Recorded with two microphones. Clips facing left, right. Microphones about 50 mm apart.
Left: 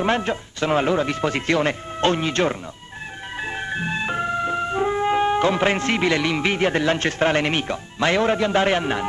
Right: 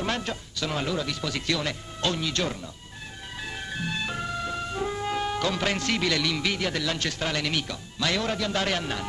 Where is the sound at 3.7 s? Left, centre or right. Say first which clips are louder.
Left 5 dB; left.